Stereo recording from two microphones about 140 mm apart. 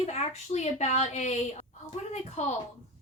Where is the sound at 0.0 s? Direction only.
50° left (ahead or behind).